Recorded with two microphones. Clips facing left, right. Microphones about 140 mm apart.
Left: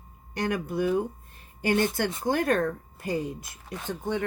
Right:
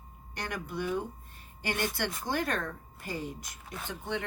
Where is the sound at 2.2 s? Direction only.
50° left (ahead or behind).